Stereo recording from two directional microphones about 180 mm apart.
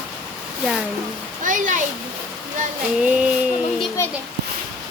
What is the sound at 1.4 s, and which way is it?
Speech, 45° right (ahead or behind).